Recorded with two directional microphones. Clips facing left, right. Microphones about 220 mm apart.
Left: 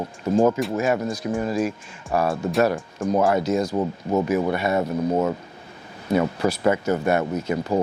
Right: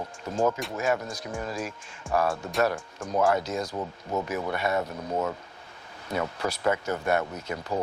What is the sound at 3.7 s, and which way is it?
Speech, 40° left (ahead or behind).